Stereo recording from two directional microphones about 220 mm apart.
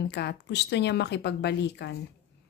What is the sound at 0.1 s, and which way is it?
Speech, 50° left (ahead or behind).